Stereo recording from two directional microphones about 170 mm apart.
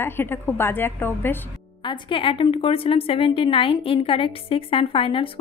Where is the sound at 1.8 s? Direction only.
30° left (ahead or behind).